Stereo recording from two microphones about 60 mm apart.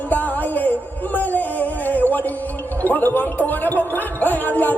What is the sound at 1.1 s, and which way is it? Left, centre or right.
Music, left.